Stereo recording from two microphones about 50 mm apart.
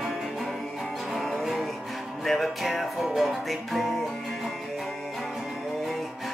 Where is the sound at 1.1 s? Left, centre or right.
Centre.